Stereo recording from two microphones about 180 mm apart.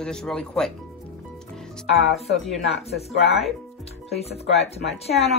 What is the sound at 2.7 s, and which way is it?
Speech, 35° left (ahead or behind).